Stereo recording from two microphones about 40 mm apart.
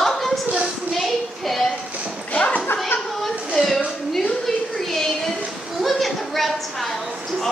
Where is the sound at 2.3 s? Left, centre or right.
Left.